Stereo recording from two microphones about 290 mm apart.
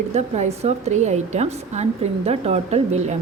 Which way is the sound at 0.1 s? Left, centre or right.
Right.